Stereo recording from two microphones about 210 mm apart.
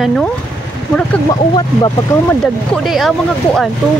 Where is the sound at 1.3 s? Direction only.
20° left (ahead or behind).